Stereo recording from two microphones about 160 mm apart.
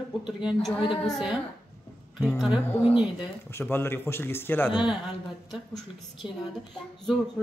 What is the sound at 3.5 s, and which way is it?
A man's voice, 15° left (ahead or behind).